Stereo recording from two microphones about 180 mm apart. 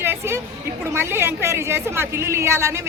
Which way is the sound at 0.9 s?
15° right (ahead or behind).